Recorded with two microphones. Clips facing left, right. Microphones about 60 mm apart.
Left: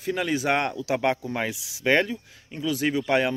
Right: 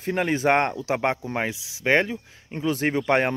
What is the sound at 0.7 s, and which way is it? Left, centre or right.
Speech, right.